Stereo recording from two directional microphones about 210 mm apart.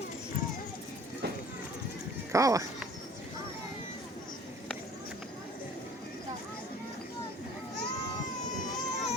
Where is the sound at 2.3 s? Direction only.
15° right (ahead or behind).